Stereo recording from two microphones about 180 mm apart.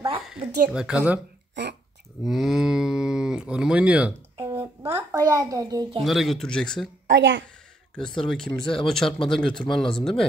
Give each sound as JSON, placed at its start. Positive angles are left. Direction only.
{"t": 0.2, "sound": "a sound", "side_deg": -5}
{"t": 0.7, "sound": "speech", "side_deg": -5}
{"t": 1.5, "sound": "speech", "side_deg": -70}
{"t": 2.2, "sound": "speech", "side_deg": 0}
{"t": 4.6, "sound": "a woman's voice", "side_deg": -15}
{"t": 5.9, "sound": "speech", "side_deg": 0}
{"t": 7.1, "sound": "a woman's voice", "side_deg": -75}
{"t": 7.9, "sound": "speech", "side_deg": 5}